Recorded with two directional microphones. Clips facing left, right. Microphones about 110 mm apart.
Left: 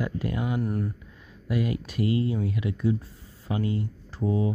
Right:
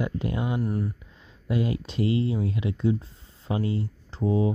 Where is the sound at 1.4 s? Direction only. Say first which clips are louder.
Right 1 dB; 25° right (ahead or behind).